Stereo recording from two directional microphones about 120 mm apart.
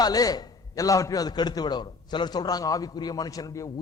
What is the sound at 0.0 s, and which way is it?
A man's voice, 30° left (ahead or behind).